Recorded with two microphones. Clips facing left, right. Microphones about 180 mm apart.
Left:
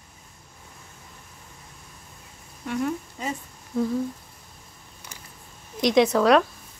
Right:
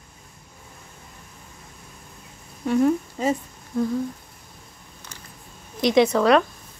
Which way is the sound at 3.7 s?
Centre (ahead or behind).